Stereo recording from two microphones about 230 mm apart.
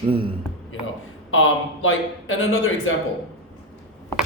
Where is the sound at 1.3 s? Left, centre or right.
Left.